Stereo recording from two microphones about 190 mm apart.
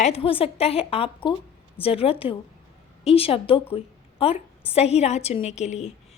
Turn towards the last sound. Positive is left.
turn(degrees=35)  # may be behind; listen again after turning